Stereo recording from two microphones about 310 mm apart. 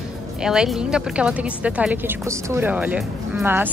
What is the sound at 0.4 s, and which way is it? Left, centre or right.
A woman's voice, centre.